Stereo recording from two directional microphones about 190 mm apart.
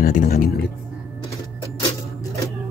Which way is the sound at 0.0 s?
45° left (ahead or behind).